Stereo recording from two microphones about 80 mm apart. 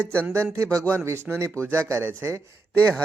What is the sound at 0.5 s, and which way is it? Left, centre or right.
Speech, right.